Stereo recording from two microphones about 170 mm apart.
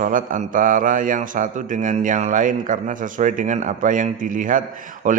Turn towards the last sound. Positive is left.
turn(degrees=-50)  # may be behind; listen again after turning